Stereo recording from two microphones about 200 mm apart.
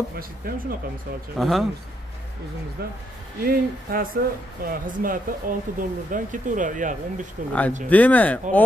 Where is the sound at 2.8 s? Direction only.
50° right (ahead or behind).